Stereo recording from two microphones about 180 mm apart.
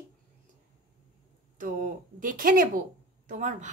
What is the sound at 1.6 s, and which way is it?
A woman's voice, 50° right (ahead or behind).